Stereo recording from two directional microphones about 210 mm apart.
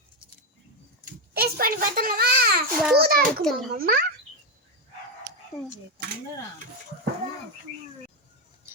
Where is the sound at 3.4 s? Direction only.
Centre (ahead or behind).